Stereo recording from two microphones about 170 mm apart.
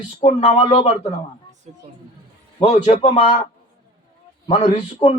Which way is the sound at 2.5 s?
30° left (ahead or behind).